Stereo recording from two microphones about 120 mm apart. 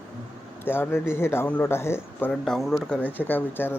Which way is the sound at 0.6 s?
20° left (ahead or behind).